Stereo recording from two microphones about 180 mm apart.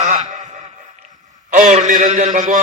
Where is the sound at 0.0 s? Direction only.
40° right (ahead or behind).